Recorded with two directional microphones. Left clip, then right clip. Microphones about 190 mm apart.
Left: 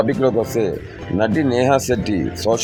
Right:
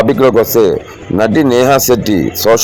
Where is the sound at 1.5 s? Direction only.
20° right (ahead or behind).